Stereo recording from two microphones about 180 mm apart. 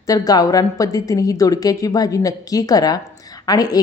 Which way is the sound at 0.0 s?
20° left (ahead or behind).